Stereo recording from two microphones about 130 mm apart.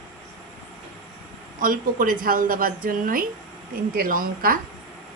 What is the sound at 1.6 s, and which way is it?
Speech, 90° right.